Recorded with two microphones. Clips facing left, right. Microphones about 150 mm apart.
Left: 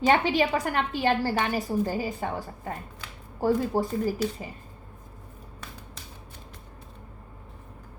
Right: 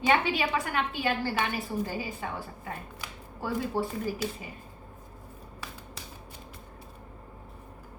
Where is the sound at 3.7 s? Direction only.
40° left (ahead or behind).